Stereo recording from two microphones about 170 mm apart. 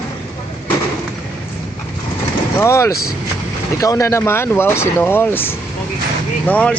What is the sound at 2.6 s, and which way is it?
Speech, 15° left (ahead or behind).